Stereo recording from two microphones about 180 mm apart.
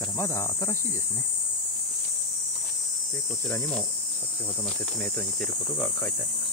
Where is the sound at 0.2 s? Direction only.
15° left (ahead or behind).